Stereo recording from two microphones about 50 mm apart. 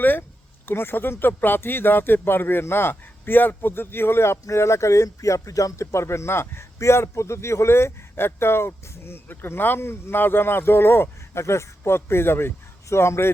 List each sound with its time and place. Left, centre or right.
0.0 s speech: left
6.7 s a man's voice: left